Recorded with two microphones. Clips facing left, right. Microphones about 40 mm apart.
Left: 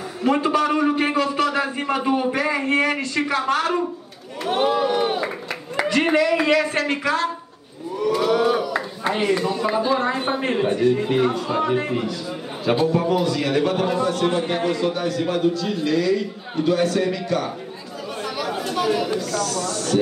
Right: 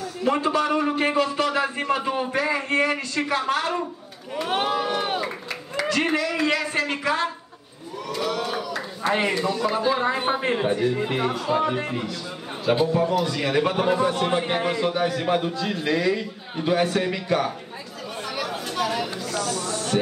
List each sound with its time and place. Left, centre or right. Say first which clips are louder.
0.2 s a man's voice: left 3 dB; centre
8.1 s a sound: left 8 dB; centre
9.3 s speech: left 3 dB; centre
9.8 s a man's voice: left 2 dB; centre
18.2 s chatter: left 3 dB; centre
19.1 s a man's voice: left 4 dB; centre